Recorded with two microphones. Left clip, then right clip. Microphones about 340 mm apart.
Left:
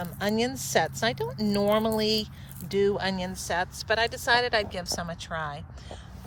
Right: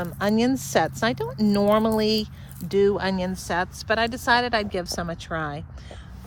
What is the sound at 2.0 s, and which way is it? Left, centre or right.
A woman's voice, centre.